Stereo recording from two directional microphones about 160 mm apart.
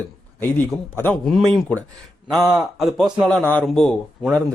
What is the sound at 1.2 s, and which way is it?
Speech, centre (ahead or behind).